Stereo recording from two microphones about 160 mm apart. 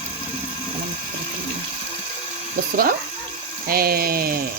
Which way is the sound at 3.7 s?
70° right (ahead or behind).